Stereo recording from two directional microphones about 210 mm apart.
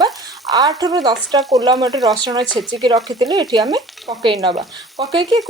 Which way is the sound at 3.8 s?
Centre (ahead or behind).